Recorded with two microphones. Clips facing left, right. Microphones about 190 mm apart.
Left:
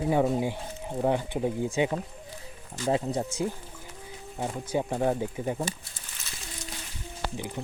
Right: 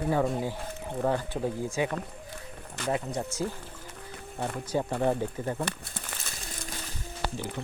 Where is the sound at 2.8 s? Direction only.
65° right (ahead or behind).